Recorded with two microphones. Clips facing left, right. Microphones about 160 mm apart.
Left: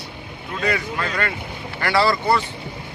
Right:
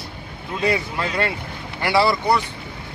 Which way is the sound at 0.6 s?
25° right (ahead or behind).